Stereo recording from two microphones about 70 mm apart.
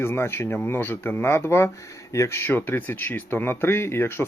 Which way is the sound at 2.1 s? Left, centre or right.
Left.